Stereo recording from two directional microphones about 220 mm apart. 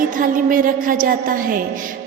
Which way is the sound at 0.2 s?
40° right (ahead or behind).